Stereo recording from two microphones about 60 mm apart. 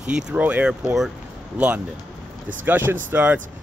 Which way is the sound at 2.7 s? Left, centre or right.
Right.